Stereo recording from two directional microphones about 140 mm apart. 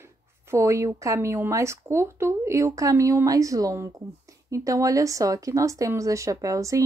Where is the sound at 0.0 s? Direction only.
20° right (ahead or behind).